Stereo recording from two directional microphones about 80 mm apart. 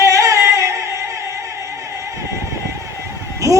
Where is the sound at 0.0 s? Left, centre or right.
Right.